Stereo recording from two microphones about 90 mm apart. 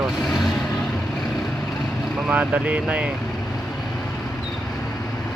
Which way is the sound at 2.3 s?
15° right (ahead or behind).